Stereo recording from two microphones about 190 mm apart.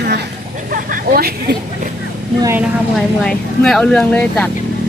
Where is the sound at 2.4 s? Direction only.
15° right (ahead or behind).